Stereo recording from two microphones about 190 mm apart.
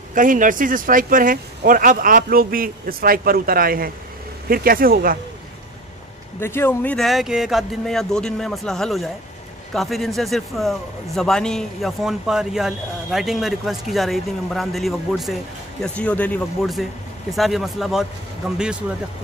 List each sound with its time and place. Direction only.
0.1 s speech: 45° right (ahead or behind)
6.4 s a man's voice: 10° left (ahead or behind); by 18.9 s 5° right (ahead or behind)